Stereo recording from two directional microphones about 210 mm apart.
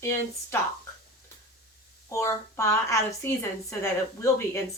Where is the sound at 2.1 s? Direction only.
15° left (ahead or behind).